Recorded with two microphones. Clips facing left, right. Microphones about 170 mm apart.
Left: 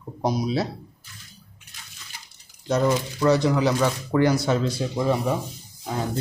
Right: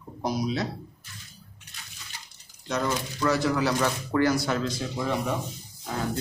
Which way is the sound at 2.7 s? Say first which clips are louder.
Left 6 dB; 30° left (ahead or behind).